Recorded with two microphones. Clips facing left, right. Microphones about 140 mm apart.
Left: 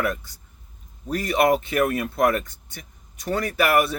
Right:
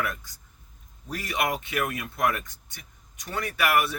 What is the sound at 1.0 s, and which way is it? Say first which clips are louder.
Speech: left 9 dB; 45° left (ahead or behind).